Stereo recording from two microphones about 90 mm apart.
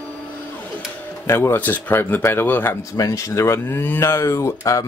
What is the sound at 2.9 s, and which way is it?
Speech, 40° left (ahead or behind).